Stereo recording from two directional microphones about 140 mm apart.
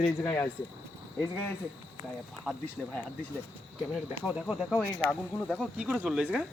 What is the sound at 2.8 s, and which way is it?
Speech, 10° left (ahead or behind).